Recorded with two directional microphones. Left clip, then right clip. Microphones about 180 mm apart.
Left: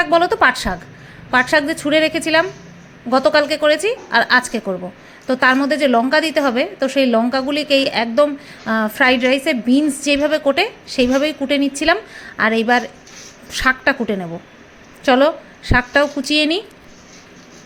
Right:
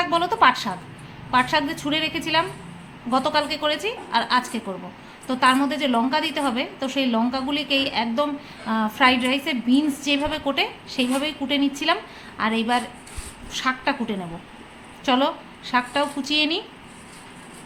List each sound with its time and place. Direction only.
0.0 s a woman's voice: 35° left (ahead or behind)